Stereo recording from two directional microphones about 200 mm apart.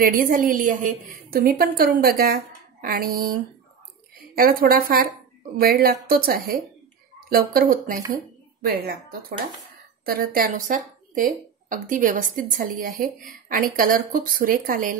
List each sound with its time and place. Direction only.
0.0 s a woman's voice: 45° right (ahead or behind)
4.4 s a woman's voice: 45° right (ahead or behind)
10.0 s a woman's voice: 45° right (ahead or behind)